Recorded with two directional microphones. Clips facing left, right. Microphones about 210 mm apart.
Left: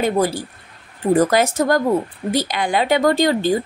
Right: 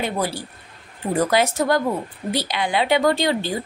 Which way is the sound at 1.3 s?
45° left (ahead or behind).